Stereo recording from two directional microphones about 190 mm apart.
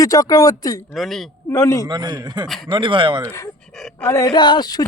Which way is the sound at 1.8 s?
20° right (ahead or behind).